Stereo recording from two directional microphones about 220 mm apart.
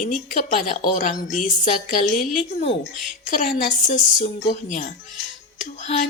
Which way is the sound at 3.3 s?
35° left (ahead or behind).